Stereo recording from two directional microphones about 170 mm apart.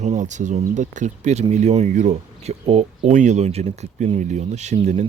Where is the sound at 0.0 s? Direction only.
45° right (ahead or behind).